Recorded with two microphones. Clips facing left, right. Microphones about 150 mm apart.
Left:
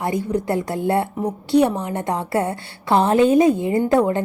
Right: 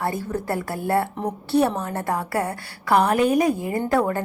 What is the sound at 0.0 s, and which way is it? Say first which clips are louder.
A woman's voice: left 4 dB; 15° left (ahead or behind).